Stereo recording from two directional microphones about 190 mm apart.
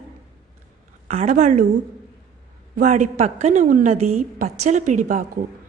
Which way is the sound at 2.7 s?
40° right (ahead or behind).